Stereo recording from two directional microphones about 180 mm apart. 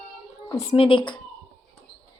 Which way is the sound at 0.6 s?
35° left (ahead or behind).